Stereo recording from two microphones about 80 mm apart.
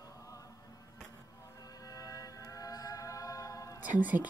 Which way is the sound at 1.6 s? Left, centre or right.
Left.